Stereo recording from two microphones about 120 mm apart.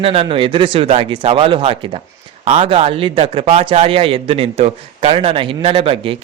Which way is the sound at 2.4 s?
65° right (ahead or behind).